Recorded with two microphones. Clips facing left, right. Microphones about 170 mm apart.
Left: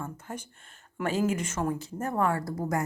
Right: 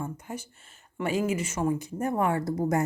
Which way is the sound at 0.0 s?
10° right (ahead or behind).